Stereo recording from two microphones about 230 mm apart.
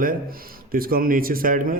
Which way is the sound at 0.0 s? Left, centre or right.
Right.